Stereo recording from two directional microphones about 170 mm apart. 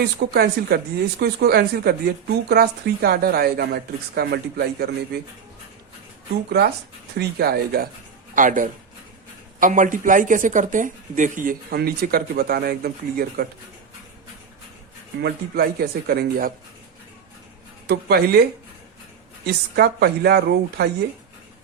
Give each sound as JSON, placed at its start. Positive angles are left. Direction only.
{"t": 0.3, "sound": "speech", "side_deg": -70}
{"t": 7.2, "sound": "speech", "side_deg": -65}
{"t": 8.4, "sound": "speech", "side_deg": -50}
{"t": 15.2, "sound": "speech", "side_deg": -65}
{"t": 17.8, "sound": "speech", "side_deg": -70}
{"t": 19.7, "sound": "speech", "side_deg": -70}